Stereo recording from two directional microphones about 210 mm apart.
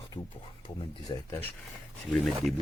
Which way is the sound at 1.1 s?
20° left (ahead or behind).